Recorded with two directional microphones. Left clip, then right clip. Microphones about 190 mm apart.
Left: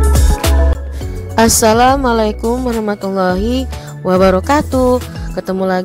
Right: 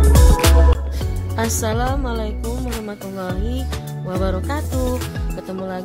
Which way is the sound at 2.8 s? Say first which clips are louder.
Left 13 dB; 45° left (ahead or behind).